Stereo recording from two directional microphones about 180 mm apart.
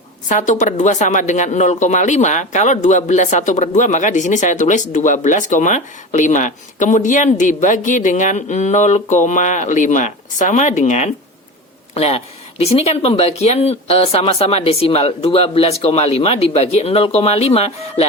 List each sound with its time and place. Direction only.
0.3 s speech: 45° left (ahead or behind)